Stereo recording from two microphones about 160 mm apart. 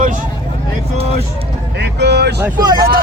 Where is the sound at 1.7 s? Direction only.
90° right.